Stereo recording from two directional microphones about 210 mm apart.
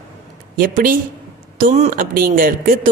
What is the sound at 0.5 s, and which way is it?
Speech, 40° right (ahead or behind).